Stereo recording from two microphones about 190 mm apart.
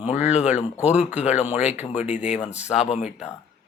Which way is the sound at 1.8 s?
35° left (ahead or behind).